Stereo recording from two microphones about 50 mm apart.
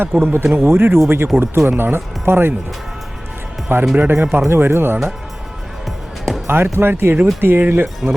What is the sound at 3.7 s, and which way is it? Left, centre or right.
Speech, right.